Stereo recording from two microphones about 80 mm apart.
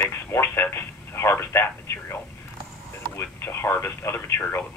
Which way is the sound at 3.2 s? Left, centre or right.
Left.